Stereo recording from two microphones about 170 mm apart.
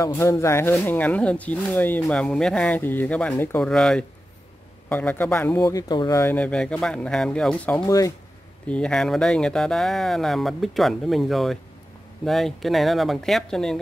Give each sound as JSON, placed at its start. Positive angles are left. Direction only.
{"t": 0.0, "sound": "speech", "side_deg": 15}
{"t": 5.6, "sound": "speech", "side_deg": 20}
{"t": 7.8, "sound": "speech", "side_deg": 20}
{"t": 8.6, "sound": "speech", "side_deg": 5}